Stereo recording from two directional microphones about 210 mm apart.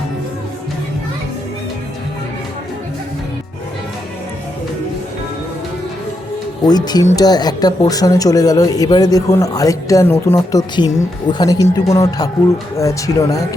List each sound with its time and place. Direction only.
6.7 s speech: 20° left (ahead or behind)